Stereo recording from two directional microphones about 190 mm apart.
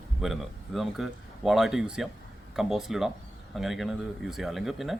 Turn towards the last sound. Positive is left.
turn(degrees=0)  # may be behind; listen again after turning